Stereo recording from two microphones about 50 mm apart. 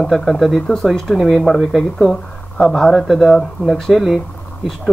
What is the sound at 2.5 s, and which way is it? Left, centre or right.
Speech, centre.